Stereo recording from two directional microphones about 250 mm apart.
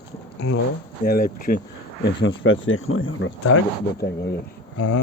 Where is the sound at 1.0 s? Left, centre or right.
Left.